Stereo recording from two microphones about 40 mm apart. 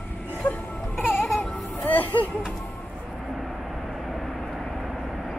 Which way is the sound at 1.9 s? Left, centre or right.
Left.